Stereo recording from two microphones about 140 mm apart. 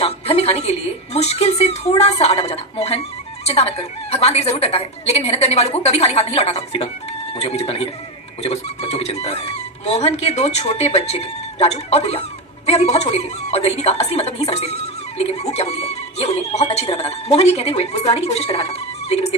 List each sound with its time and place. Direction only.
0.0 s speech: 50° left (ahead or behind)